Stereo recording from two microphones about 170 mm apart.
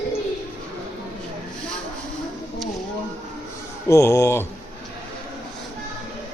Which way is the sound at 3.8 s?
15° left (ahead or behind).